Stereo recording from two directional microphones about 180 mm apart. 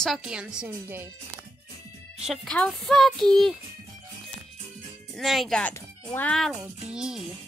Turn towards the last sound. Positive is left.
turn(degrees=-5)  # may be behind; listen again after turning